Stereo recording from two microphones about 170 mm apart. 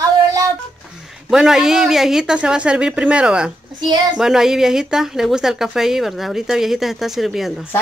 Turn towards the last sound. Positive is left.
turn(degrees=0)  # may be behind; listen again after turning